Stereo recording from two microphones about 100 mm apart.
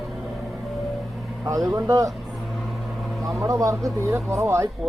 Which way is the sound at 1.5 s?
35° right (ahead or behind).